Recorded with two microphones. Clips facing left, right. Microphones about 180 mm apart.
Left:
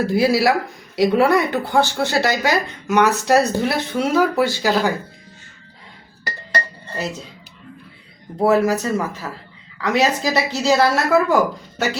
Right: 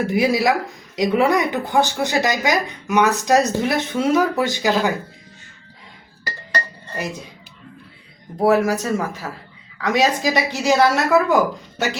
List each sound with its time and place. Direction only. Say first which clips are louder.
0.0 s a woman's voice: left 1 dB; 15° right (ahead or behind)
6.9 s a woman's voice: left 1 dB; 15° right (ahead or behind)
8.4 s a woman's voice: even; 15° right (ahead or behind)